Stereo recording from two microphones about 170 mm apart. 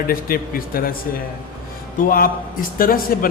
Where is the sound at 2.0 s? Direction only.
55° left (ahead or behind).